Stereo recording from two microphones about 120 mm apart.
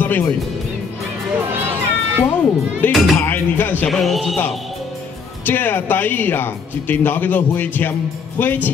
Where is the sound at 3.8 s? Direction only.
Centre (ahead or behind).